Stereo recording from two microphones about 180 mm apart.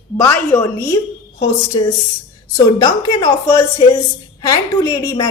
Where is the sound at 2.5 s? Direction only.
20° left (ahead or behind).